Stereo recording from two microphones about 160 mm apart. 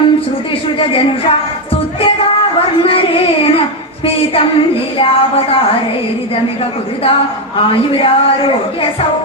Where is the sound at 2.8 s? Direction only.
35° left (ahead or behind).